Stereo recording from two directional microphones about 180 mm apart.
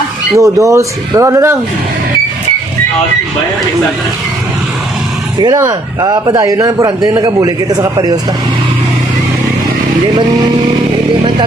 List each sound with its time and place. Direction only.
0.3 s speech: 15° right (ahead or behind)
5.4 s a man's voice: 20° right (ahead or behind)